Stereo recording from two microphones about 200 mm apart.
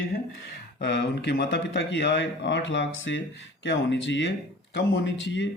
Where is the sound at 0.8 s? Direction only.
55° left (ahead or behind).